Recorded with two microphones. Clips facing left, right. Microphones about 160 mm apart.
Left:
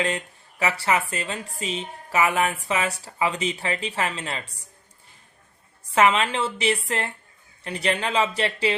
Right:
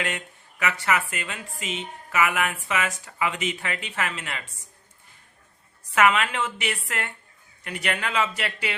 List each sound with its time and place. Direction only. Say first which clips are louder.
0.6 s a woman's voice: left 2 dB; 30° left (ahead or behind)
5.9 s a woman's voice: left 1 dB; 30° left (ahead or behind)